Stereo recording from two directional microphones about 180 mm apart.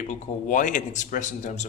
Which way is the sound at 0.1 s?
45° left (ahead or behind).